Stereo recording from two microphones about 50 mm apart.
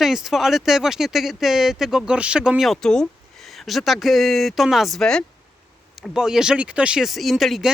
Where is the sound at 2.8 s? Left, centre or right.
Centre.